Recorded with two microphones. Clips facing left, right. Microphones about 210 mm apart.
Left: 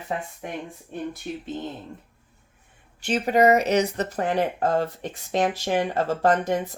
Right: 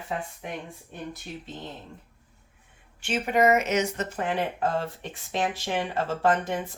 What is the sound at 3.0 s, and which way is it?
Speech, 35° left (ahead or behind).